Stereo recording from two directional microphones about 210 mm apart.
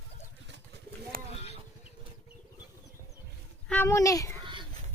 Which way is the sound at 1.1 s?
45° right (ahead or behind).